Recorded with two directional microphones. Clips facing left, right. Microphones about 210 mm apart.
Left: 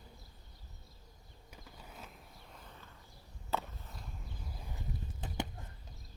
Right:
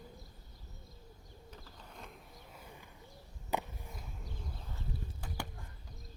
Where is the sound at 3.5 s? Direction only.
15° right (ahead or behind).